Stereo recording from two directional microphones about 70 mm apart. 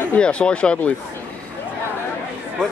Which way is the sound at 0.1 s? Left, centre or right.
Centre.